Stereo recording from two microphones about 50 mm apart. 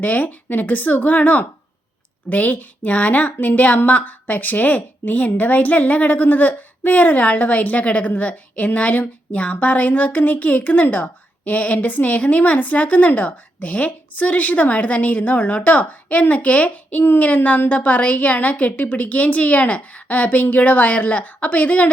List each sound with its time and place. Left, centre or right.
0.0 s a woman's voice: left
11.4 s a woman's voice: left